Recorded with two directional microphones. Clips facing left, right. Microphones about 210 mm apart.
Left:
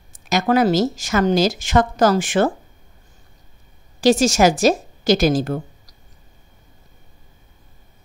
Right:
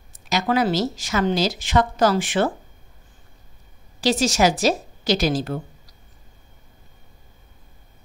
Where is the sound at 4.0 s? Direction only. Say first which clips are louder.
Left 5 dB; 45° left (ahead or behind).